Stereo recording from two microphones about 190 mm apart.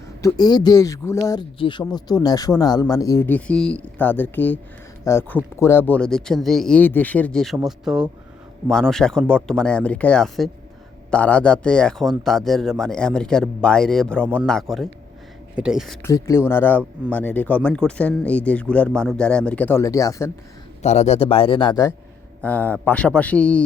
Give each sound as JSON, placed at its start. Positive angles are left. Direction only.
{"t": 0.2, "sound": "speech", "side_deg": 20}
{"t": 16.0, "sound": "speech", "side_deg": 15}
{"t": 20.8, "sound": "speech", "side_deg": 35}
{"t": 22.4, "sound": "speech", "side_deg": 5}